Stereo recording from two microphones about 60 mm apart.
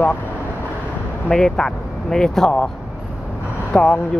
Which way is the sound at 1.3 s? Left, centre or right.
Centre.